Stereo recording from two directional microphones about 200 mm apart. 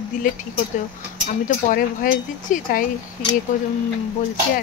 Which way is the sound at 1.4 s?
40° left (ahead or behind).